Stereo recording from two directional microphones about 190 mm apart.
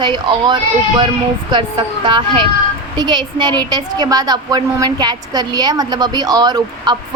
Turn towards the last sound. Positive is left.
turn(degrees=-20)  # may be behind; listen again after turning